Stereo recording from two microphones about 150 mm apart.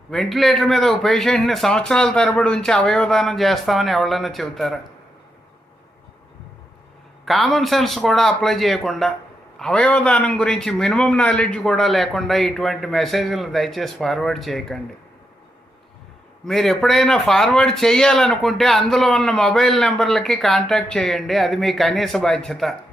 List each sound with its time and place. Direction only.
0.1 s a man's voice: centre (ahead or behind)
7.3 s a man's voice: centre (ahead or behind)
16.5 s a man's voice: centre (ahead or behind)